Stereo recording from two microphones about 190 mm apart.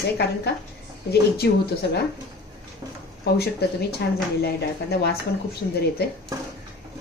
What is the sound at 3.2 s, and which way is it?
Speech, 60° left (ahead or behind).